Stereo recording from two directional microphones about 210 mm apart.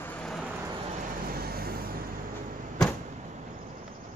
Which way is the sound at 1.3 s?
45° right (ahead or behind).